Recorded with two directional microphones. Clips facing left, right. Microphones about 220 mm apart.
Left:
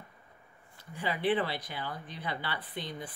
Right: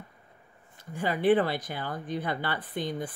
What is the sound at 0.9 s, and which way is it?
Speech, 45° right (ahead or behind).